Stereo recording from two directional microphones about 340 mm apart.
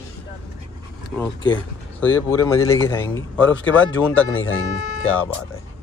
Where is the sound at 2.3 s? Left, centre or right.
Centre.